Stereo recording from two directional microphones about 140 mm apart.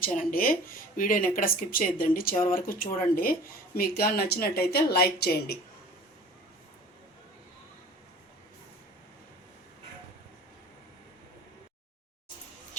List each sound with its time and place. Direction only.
0.0 s speech: 75° left (ahead or behind)
1.4 s speech: 90° left